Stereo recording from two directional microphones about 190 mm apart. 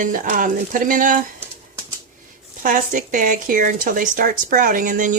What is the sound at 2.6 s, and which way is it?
Speech, 45° right (ahead or behind).